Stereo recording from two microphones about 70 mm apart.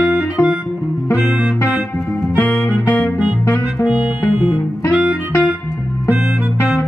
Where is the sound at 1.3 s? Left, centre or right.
Centre.